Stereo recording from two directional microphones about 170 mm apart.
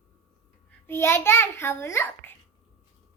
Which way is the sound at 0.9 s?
15° left (ahead or behind).